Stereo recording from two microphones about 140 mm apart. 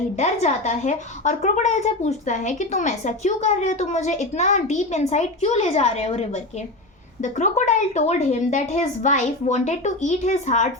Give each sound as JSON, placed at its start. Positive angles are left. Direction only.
{"t": 0.2, "sound": "a woman's voice", "side_deg": 55}
{"t": 7.2, "sound": "a woman's voice", "side_deg": 60}